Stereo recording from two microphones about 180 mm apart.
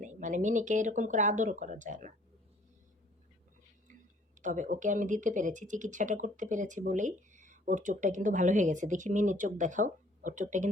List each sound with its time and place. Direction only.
0.0 s speech: 45° right (ahead or behind)
4.4 s speech: 45° right (ahead or behind)